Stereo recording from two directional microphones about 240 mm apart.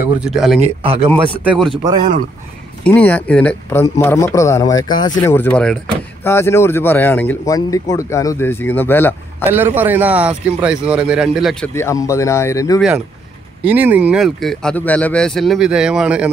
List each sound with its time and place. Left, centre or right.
0.0 s speech: centre
0.6 s speech: right
1.4 s speech: centre
1.8 s speech: centre
2.8 s speech: centre
9.8 s speech: centre
11.7 s speech: centre
13.7 s speech: centre